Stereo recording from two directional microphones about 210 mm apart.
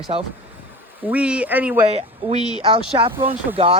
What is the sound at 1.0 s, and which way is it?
Speech, 5° right (ahead or behind).